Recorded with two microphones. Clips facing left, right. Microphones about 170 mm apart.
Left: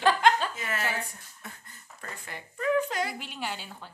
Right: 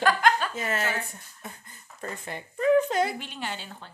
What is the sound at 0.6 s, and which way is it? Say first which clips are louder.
Speech: right 3 dB; 25° right (ahead or behind).